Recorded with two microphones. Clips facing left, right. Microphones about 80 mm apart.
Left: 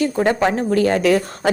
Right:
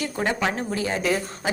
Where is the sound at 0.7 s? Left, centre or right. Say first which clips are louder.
Left 9 dB; left.